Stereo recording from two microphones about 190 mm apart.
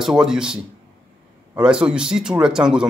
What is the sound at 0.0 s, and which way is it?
Speech, 5° right (ahead or behind).